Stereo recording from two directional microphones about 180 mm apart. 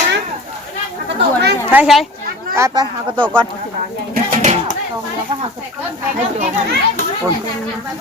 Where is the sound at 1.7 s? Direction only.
5° right (ahead or behind).